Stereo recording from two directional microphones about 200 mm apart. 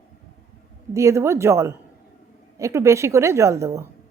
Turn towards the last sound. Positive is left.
turn(degrees=-15)  # may be behind; listen again after turning